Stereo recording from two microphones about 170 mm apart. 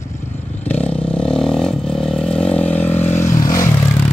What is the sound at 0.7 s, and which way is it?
Vehicle, 10° left (ahead or behind).